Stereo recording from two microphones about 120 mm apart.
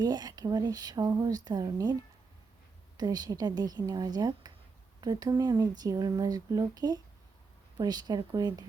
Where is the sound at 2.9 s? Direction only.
35° right (ahead or behind).